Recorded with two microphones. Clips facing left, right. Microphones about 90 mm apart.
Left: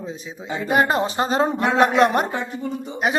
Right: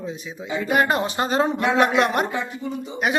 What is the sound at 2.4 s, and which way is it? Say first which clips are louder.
Speech: left 1 dB; 50° left (ahead or behind).